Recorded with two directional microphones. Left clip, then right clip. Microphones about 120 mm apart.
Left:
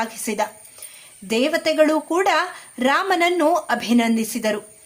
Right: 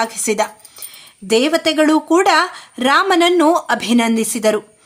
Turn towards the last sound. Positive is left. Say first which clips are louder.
# right 6 dB
turn(degrees=-40)  # may be behind; listen again after turning